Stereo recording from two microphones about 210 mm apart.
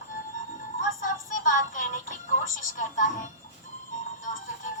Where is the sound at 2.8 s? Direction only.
35° left (ahead or behind).